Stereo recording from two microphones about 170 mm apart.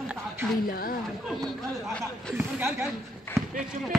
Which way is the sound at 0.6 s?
55° left (ahead or behind).